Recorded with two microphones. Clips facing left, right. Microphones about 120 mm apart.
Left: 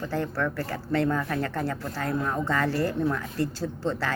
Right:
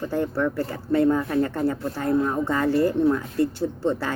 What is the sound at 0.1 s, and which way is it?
Speech, 20° right (ahead or behind).